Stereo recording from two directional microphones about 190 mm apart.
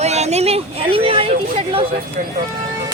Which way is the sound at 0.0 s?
35° right (ahead or behind).